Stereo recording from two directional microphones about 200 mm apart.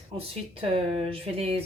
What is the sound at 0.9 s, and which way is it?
Speech, 30° right (ahead or behind).